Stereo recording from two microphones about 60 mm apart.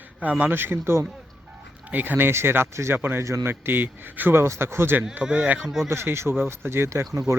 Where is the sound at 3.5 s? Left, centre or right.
Right.